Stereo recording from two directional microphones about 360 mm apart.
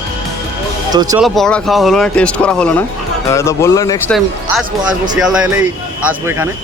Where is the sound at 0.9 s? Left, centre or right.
Centre.